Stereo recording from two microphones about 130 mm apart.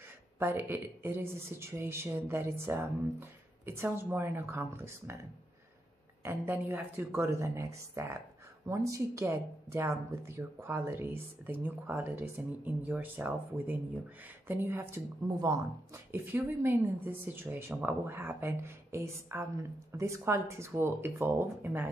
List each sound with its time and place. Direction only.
0.4 s speech: 15° right (ahead or behind)
6.2 s a woman's voice: 15° right (ahead or behind)
15.2 s speech: 30° right (ahead or behind)
16.1 s a woman's voice: 15° right (ahead or behind)